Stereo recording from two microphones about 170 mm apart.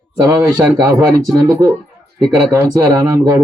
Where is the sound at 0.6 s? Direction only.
15° right (ahead or behind).